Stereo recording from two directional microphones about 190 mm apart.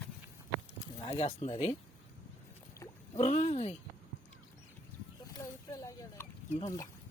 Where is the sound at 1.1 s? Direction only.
35° left (ahead or behind).